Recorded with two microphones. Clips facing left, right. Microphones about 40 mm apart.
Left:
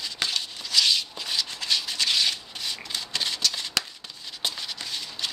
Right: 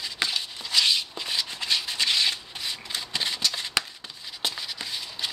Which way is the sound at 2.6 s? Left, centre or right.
Centre.